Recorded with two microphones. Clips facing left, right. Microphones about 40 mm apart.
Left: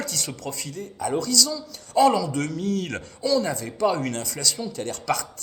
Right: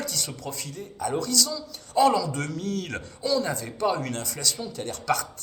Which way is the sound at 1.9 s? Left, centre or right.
Left.